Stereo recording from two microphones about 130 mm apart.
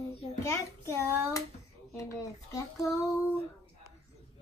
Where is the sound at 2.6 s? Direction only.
25° left (ahead or behind).